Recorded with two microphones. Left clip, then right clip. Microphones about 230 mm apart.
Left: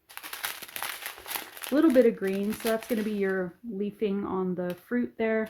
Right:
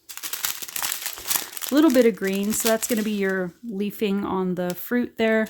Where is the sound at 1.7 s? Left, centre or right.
Right.